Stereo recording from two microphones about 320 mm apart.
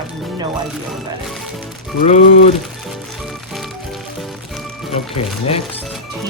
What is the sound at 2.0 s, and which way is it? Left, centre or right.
Speech, left.